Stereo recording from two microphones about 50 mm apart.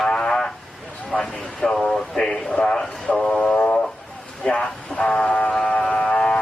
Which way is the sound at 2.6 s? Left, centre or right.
Left.